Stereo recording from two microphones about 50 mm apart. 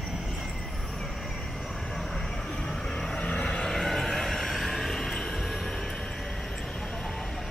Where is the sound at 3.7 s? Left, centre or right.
Centre.